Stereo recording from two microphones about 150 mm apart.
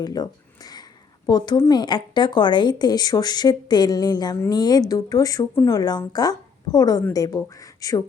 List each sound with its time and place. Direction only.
0.0 s speech: 25° left (ahead or behind)
1.5 s speech: 20° left (ahead or behind)
1.8 s a woman's voice: 30° left (ahead or behind)